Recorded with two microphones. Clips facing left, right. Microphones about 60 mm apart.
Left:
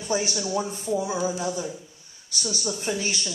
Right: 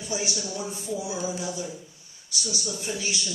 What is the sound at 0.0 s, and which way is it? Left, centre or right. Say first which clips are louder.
A woman's voice: left 4 dB; left.